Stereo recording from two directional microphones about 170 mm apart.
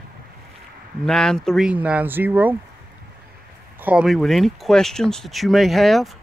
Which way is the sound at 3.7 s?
5° right (ahead or behind).